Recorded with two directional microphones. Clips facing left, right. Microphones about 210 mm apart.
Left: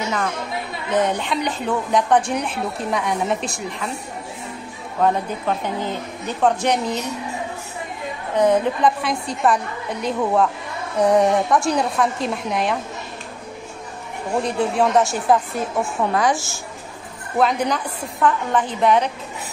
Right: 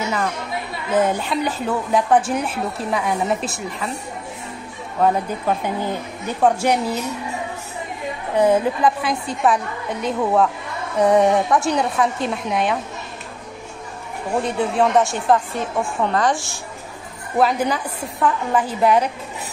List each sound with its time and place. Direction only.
0.8 s a woman's voice: 5° right (ahead or behind)
5.0 s speech: 10° right (ahead or behind)
8.4 s a woman's voice: 5° right (ahead or behind)
14.3 s a woman's voice: centre (ahead or behind)